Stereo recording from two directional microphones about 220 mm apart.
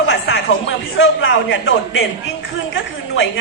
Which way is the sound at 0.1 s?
60° left (ahead or behind).